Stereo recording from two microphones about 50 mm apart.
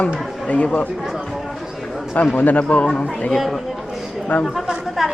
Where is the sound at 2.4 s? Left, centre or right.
Left.